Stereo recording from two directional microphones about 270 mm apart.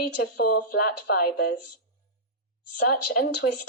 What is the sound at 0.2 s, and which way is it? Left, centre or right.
A woman's voice, left.